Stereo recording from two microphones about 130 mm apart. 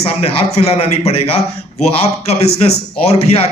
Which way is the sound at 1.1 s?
50° left (ahead or behind).